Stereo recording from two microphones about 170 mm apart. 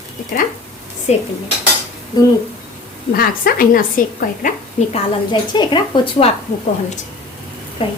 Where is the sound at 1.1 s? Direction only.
40° left (ahead or behind).